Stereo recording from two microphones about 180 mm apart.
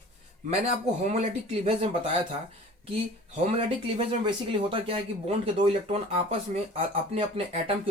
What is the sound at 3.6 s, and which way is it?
Speech, 30° right (ahead or behind).